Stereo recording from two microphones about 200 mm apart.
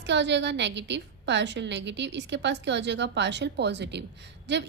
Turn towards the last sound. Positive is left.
turn(degrees=-60)  # may be behind; listen again after turning